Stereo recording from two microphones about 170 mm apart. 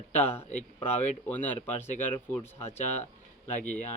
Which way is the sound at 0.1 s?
10° left (ahead or behind).